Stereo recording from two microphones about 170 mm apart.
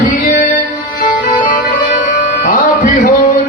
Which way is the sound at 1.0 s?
55° left (ahead or behind).